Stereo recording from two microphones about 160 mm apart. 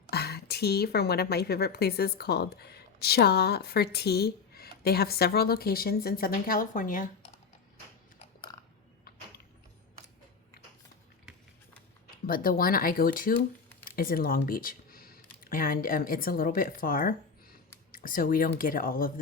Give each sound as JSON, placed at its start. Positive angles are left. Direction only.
{"t": 0.1, "sound": "a woman's voice", "side_deg": 85}
{"t": 12.2, "sound": "speech", "side_deg": 65}